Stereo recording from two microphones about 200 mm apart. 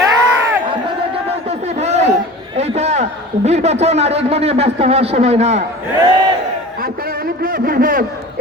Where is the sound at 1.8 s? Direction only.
35° right (ahead or behind).